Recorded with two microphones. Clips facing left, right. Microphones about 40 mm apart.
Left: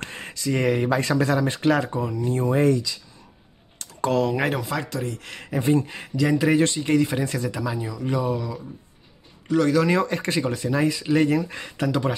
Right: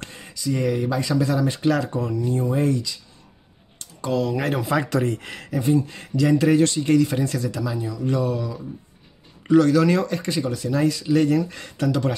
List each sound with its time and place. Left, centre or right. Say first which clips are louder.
0.0 s speech: even; left
1.3 s speech: even; left
1.9 s speech: right 1 dB; centre
2.2 s speech: left 2 dB; left
4.0 s speech: left 2 dB; left
4.6 s speech: right 5 dB; centre
4.8 s speech: right 7 dB; right
5.5 s speech: even; left
6.1 s speech: right 2 dB; centre
9.6 s speech: right 2 dB; centre
10.0 s speech: even; left